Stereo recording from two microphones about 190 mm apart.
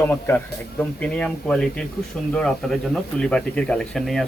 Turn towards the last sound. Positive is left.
turn(degrees=0)  # may be behind; listen again after turning